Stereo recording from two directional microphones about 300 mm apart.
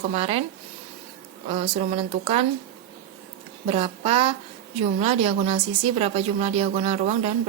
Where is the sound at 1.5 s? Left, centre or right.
Right.